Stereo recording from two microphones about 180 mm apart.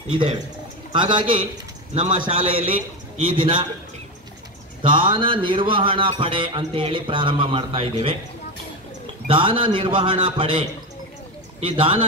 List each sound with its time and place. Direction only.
0.1 s speech: 25° right (ahead or behind)
4.8 s speech: 30° right (ahead or behind)
9.3 s speech: 30° right (ahead or behind)
11.6 s speech: 30° right (ahead or behind)